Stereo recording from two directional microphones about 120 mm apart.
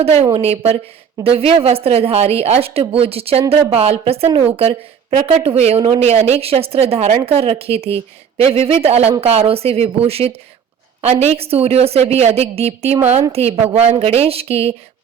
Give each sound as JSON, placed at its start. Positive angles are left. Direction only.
{"t": 0.0, "sound": "speech", "side_deg": -55}